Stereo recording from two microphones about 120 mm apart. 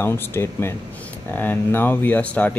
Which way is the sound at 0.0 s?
20° left (ahead or behind).